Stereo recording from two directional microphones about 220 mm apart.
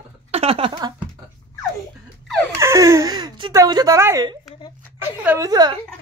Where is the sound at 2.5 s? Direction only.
15° right (ahead or behind).